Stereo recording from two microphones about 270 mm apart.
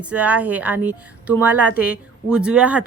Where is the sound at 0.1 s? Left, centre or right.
Centre.